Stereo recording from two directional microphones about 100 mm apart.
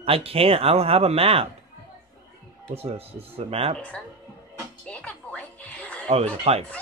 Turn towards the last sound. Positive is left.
turn(degrees=-90)